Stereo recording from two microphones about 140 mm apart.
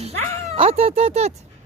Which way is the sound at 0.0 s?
45° right (ahead or behind).